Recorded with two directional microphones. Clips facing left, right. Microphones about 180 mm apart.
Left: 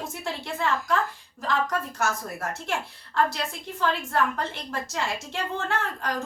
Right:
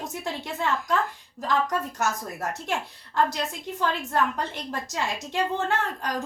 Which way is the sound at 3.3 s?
20° right (ahead or behind).